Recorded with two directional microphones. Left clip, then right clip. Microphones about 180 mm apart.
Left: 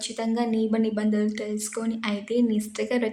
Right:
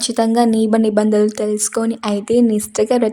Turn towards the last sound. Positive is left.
turn(degrees=-50)  # may be behind; listen again after turning